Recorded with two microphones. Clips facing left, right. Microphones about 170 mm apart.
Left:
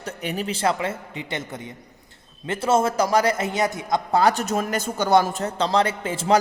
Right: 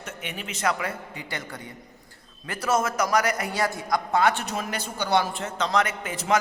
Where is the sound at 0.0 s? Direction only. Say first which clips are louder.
Left 8 dB; 35° left (ahead or behind).